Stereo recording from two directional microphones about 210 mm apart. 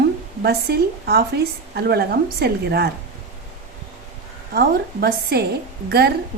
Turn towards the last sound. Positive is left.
turn(degrees=-50)  # may be behind; listen again after turning